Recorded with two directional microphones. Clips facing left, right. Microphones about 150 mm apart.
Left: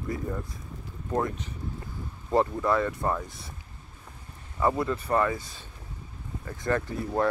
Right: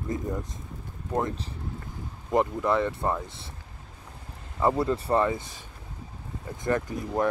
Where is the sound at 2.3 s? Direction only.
15° right (ahead or behind).